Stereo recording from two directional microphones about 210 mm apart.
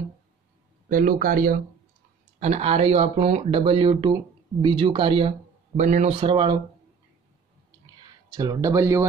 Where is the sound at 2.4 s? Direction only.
30° right (ahead or behind).